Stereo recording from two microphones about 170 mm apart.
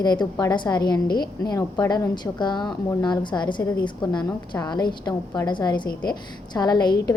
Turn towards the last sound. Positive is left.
turn(degrees=25)  # may be behind; listen again after turning